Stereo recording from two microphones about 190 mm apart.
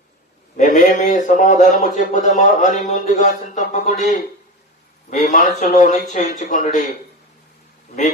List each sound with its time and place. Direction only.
0.6 s a man's voice: 45° left (ahead or behind)